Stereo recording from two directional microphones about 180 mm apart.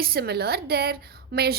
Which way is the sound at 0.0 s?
60° right (ahead or behind).